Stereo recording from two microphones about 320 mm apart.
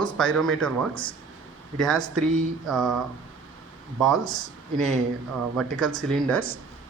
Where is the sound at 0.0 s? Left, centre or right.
Centre.